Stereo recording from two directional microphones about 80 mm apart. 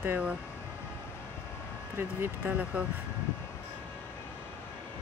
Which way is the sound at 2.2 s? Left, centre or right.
Centre.